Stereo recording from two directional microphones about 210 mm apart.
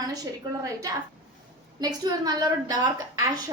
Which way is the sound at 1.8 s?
20° right (ahead or behind).